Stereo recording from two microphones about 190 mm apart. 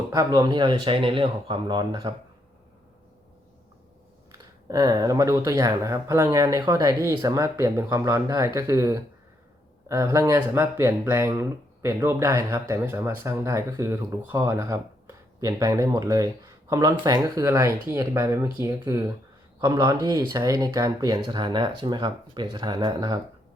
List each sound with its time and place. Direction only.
0.1 s speech: 20° right (ahead or behind)
4.3 s speech: 20° right (ahead or behind)